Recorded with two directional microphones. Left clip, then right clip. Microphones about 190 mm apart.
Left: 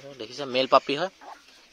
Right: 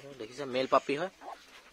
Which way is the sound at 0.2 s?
25° left (ahead or behind).